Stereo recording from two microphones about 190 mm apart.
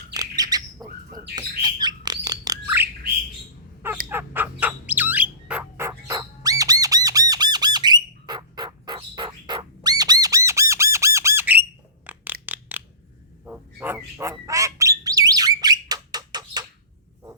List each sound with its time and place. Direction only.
0.1 s bird: 20° right (ahead or behind)
4.1 s bird: 10° right (ahead or behind)
12.0 s a sound: 10° right (ahead or behind)
13.4 s bird: 10° right (ahead or behind)